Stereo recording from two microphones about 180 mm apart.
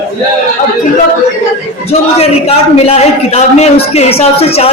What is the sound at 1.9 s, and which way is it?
A man's voice, 35° left (ahead or behind).